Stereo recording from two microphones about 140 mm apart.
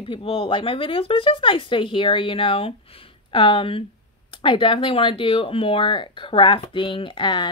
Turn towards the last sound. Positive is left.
turn(degrees=35)  # may be behind; listen again after turning